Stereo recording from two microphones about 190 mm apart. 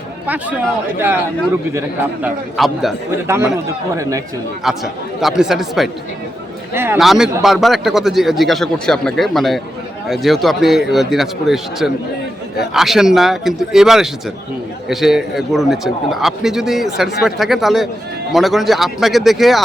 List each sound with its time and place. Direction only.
0.9 s speech: 10° right (ahead or behind)
2.2 s a man's voice: centre (ahead or behind)
3.2 s speech: 10° right (ahead or behind)
4.6 s a man's voice: centre (ahead or behind)
6.7 s speech: 10° right (ahead or behind)
7.0 s a man's voice: centre (ahead or behind)